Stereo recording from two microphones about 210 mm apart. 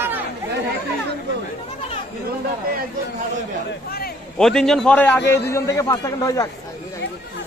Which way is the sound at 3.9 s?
45° left (ahead or behind).